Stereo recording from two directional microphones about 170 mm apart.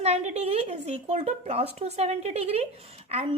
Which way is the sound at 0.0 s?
40° right (ahead or behind).